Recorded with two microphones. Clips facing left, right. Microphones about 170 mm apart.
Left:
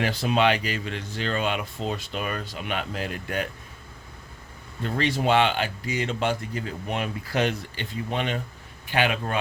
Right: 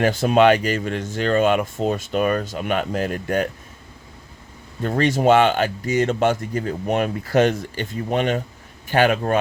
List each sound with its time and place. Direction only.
0.0 s speech: 45° right (ahead or behind)
4.8 s speech: 45° right (ahead or behind)